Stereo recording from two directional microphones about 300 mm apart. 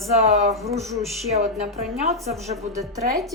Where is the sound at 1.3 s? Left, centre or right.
Right.